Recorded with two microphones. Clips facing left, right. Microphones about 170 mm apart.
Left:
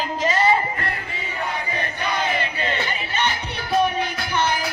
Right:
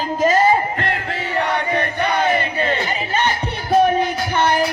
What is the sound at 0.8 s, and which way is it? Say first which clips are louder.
Crowd: right 6 dB; 90° right.